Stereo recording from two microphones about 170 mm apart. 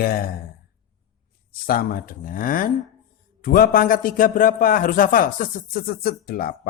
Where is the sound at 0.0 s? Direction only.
60° left (ahead or behind).